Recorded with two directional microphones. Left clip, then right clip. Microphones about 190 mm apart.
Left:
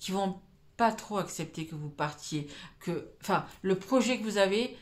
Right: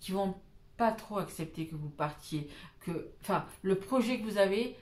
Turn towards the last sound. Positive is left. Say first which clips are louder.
# left 2 dB
turn(degrees=40)  # may be behind; listen again after turning